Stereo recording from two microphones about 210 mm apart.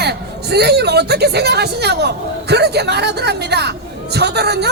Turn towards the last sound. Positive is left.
turn(degrees=-50)  # may be behind; listen again after turning